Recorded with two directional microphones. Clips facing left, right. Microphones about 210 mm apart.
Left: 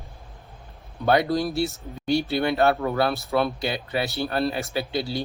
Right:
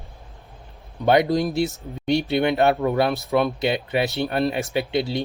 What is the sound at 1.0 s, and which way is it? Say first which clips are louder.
Speech: right 3 dB; 20° right (ahead or behind).